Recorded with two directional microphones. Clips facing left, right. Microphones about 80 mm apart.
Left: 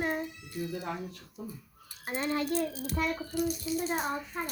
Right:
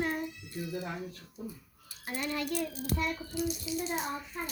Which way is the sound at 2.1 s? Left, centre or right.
Left.